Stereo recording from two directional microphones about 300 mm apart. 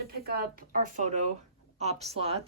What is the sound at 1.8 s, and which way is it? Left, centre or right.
Speech, right.